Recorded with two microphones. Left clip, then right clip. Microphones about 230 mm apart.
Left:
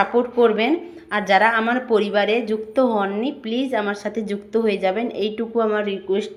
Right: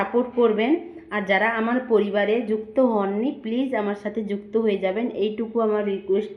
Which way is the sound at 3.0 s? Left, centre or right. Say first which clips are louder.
Left 2 dB; centre.